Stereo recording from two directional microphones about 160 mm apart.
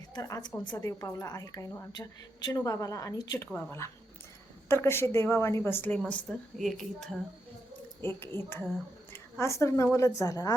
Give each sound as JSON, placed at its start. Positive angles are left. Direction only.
{"t": 0.1, "sound": "a woman's voice", "side_deg": 20}
{"t": 8.0, "sound": "a woman's voice", "side_deg": 15}